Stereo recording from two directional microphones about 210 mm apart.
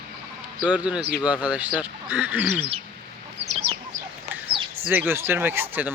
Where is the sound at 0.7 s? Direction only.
5° right (ahead or behind).